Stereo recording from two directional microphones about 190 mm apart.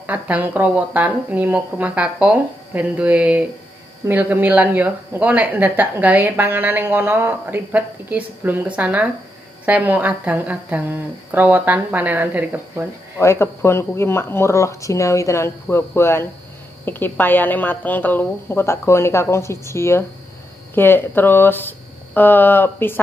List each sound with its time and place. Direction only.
0.0 s speech: 10° right (ahead or behind)
13.2 s a woman's voice: 15° left (ahead or behind)